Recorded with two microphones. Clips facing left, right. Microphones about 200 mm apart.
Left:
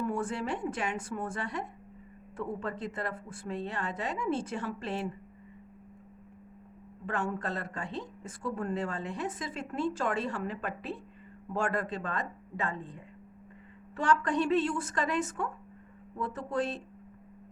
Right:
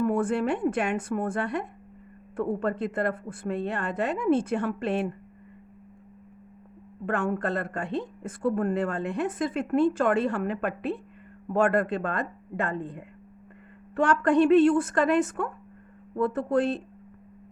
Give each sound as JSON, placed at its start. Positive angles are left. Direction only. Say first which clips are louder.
{"t": 0.0, "sound": "speech", "louder": "right 8 dB", "side_deg": -55}
{"t": 7.0, "sound": "speech", "louder": "right 6 dB", "side_deg": -55}